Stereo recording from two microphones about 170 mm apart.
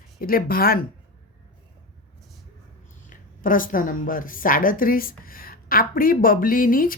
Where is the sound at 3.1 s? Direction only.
55° left (ahead or behind).